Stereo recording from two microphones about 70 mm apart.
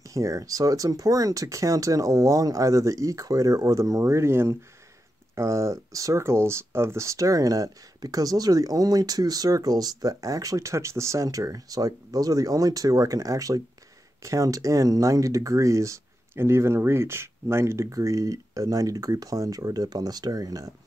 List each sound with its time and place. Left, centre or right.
0.1 s speech: right